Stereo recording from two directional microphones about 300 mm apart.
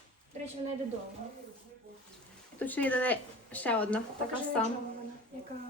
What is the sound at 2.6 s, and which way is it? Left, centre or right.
Speech, centre.